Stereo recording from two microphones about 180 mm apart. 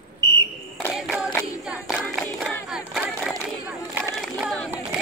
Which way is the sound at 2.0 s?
5° left (ahead or behind).